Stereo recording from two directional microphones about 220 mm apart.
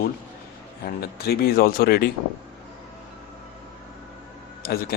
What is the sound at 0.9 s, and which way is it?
Speech, 45° left (ahead or behind).